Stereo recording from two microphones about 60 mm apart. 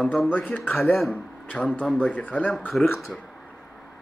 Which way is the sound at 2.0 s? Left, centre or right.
Left.